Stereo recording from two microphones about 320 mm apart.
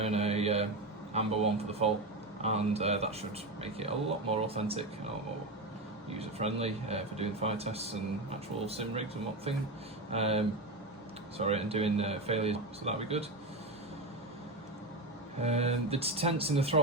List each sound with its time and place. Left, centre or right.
0.0 s a sound: centre
1.1 s a man's voice: centre
6.1 s a man's voice: centre
15.4 s speech: centre